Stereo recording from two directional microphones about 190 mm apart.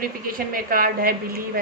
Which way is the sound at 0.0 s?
50° right (ahead or behind).